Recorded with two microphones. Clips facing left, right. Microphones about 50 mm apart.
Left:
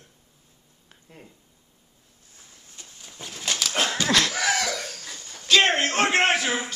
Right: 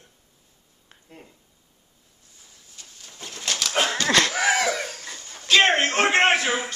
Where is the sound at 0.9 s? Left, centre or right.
Centre.